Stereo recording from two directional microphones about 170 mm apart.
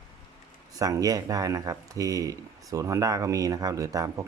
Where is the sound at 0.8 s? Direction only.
20° right (ahead or behind).